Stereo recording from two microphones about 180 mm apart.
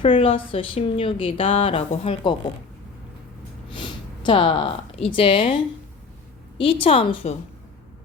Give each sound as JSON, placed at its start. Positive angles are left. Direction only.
{"t": 0.0, "sound": "a woman's voice", "side_deg": 30}
{"t": 3.7, "sound": "speech", "side_deg": 25}
{"t": 6.6, "sound": "a woman's voice", "side_deg": 30}